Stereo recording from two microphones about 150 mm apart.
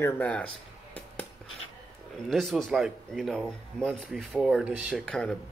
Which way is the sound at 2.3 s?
Centre (ahead or behind).